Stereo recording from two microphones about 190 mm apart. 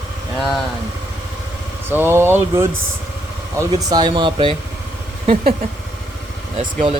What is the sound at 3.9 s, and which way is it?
Speech, 20° right (ahead or behind).